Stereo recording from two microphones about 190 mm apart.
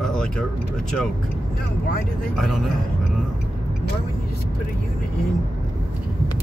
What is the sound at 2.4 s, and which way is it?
Speech, centre (ahead or behind).